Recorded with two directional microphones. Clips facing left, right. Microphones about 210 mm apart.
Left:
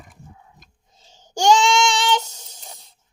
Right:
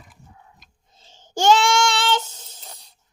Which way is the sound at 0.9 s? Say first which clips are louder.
Right 1 dB; 10° left (ahead or behind).